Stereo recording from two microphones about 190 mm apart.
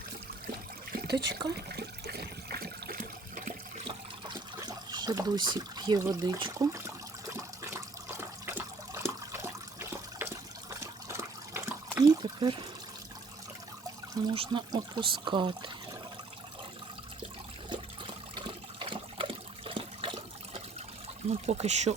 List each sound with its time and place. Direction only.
1.1 s speech: 20° right (ahead or behind)
1.5 s water: 55° right (ahead or behind)
4.9 s speech: 20° right (ahead or behind)
7.3 s water: 15° right (ahead or behind)
14.3 s speech: 25° right (ahead or behind)
17.7 s water: 25° right (ahead or behind)
21.2 s speech: 35° right (ahead or behind)